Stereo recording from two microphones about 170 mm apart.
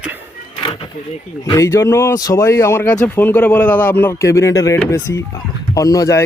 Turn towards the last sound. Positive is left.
turn(degrees=20)  # may be behind; listen again after turning